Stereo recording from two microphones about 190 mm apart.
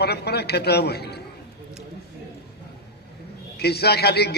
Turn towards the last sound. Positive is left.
turn(degrees=60)  # may be behind; listen again after turning